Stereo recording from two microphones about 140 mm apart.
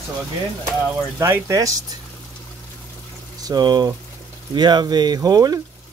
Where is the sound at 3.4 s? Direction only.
30° right (ahead or behind).